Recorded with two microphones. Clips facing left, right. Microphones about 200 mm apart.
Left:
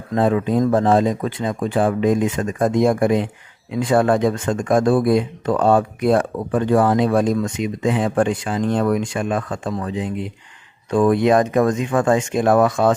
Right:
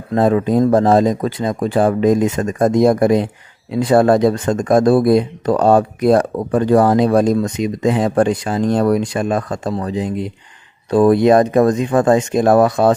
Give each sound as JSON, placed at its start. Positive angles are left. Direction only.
{"t": 0.1, "sound": "speech", "side_deg": -40}